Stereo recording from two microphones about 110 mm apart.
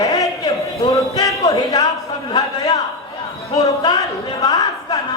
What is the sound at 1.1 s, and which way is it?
Music, 35° left (ahead or behind).